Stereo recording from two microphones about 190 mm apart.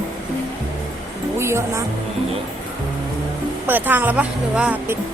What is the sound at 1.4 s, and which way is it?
Speech, 15° right (ahead or behind).